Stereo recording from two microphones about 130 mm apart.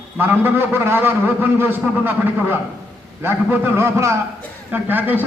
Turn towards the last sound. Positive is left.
turn(degrees=-15)  # may be behind; listen again after turning